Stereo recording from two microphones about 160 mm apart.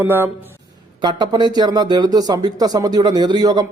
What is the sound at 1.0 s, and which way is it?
Speech, 25° right (ahead or behind).